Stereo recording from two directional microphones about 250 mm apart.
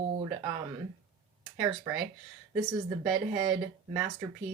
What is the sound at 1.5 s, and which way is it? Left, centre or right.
Speech, centre.